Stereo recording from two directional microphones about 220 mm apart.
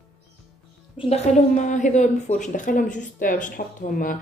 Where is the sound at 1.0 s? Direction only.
30° left (ahead or behind).